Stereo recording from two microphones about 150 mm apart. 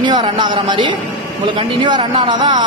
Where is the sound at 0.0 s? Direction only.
30° right (ahead or behind).